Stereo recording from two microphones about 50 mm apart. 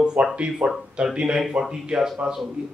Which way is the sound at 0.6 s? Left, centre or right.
Right.